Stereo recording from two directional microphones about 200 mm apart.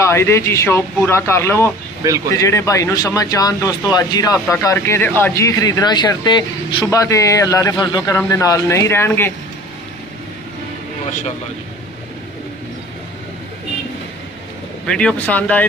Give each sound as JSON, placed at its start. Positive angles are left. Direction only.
{"t": 0.0, "sound": "speech", "side_deg": 15}
{"t": 14.9, "sound": "speech", "side_deg": 5}